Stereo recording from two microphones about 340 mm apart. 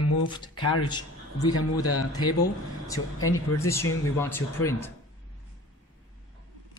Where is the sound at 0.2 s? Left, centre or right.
Centre.